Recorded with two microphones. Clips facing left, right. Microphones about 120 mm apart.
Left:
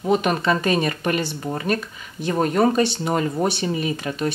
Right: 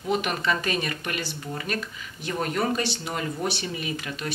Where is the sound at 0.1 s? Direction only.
35° left (ahead or behind).